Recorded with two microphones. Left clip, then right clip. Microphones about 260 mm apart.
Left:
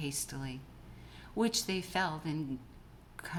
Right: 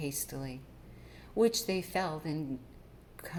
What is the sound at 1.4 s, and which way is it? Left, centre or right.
Speech, centre.